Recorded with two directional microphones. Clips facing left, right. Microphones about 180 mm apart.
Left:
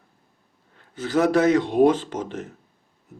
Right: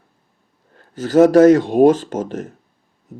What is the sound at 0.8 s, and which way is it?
Speech, 40° right (ahead or behind).